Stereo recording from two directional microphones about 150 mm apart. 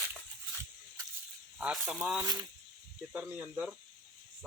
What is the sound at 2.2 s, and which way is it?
Speech, 25° right (ahead or behind).